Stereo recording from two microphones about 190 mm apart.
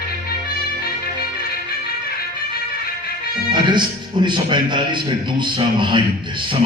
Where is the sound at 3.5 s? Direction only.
25° right (ahead or behind).